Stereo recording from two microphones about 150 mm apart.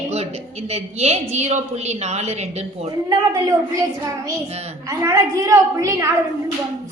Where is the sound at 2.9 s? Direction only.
25° right (ahead or behind).